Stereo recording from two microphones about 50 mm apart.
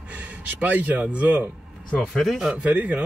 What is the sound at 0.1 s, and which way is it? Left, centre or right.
Speech, right.